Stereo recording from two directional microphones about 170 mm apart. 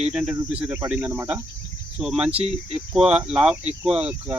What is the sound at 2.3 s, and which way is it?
Speech, 35° right (ahead or behind).